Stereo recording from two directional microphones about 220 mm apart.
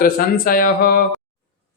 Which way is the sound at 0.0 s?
40° left (ahead or behind).